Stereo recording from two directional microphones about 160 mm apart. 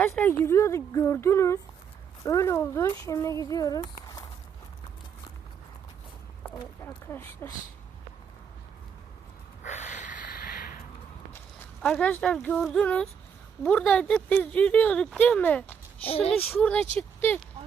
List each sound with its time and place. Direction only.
0.1 s a woman's voice: 15° left (ahead or behind)
6.8 s a woman's voice: 15° left (ahead or behind)
9.6 s snort: 50° left (ahead or behind)
11.8 s a woman's voice: 5° left (ahead or behind)
16.0 s a child's voice: 35° left (ahead or behind)
16.4 s a woman's voice: 10° left (ahead or behind)